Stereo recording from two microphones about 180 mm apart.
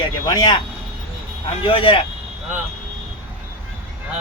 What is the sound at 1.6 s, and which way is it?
Speech, 30° left (ahead or behind).